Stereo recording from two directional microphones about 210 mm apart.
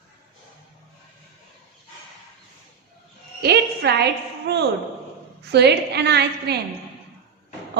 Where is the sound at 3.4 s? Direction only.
50° right (ahead or behind).